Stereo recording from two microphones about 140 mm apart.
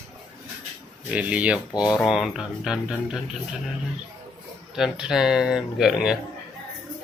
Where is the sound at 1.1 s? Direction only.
10° right (ahead or behind).